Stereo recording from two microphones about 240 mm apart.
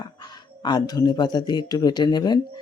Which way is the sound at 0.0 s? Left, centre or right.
Centre.